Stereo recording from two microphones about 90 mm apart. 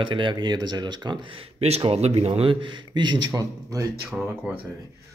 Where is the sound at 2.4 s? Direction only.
65° right (ahead or behind).